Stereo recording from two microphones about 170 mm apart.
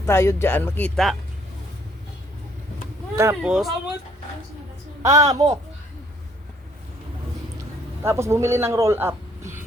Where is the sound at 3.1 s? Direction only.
15° right (ahead or behind).